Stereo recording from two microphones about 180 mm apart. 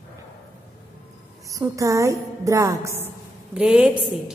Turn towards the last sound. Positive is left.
turn(degrees=-5)  # may be behind; listen again after turning